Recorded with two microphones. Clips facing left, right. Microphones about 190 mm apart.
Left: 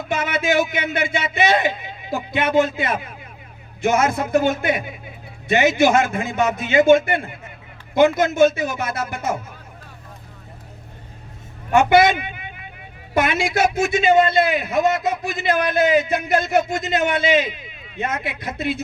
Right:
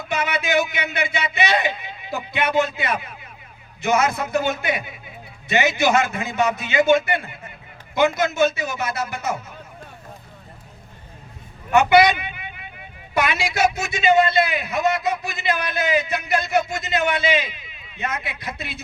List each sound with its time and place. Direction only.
0.1 s a man's voice: 50° left (ahead or behind)
11.7 s a man's voice: 50° left (ahead or behind)